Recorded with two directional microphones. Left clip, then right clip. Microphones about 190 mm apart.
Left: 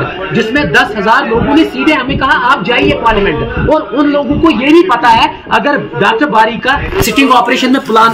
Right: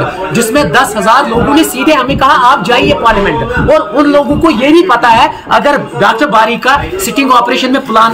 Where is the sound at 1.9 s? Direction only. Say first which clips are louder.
Right 6 dB; 30° right (ahead or behind).